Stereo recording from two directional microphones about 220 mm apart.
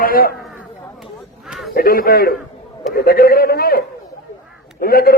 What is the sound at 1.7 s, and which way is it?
A man's voice, 45° left (ahead or behind).